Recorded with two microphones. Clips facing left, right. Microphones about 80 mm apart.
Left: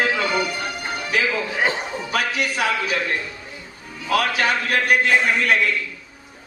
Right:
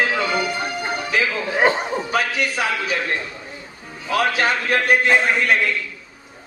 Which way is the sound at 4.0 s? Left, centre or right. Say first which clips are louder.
Right 1 dB; right.